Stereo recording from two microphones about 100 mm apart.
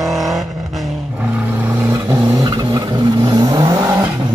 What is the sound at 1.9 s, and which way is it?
Vehicle, 30° right (ahead or behind).